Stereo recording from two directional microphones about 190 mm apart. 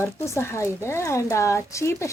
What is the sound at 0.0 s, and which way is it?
Speech, 15° left (ahead or behind).